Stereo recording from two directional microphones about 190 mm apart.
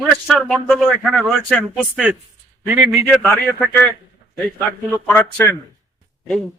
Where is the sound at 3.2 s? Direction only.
5° left (ahead or behind).